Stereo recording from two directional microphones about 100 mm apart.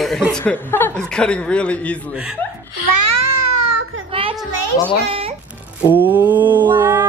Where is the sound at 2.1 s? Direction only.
10° right (ahead or behind).